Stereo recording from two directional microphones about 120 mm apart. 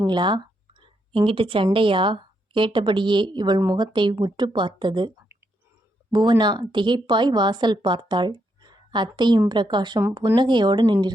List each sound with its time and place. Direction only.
0.0 s a woman's voice: 40° right (ahead or behind)